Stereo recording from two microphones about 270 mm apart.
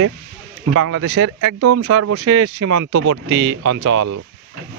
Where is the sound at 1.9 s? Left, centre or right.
Right.